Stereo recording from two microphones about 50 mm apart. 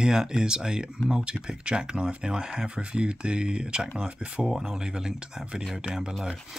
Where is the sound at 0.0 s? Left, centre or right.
Centre.